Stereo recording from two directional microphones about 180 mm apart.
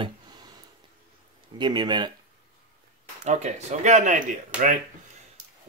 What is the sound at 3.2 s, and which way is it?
Speech, 40° right (ahead or behind).